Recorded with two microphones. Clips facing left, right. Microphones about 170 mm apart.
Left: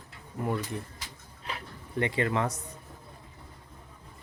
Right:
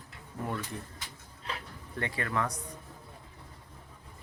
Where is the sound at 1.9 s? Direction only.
20° left (ahead or behind).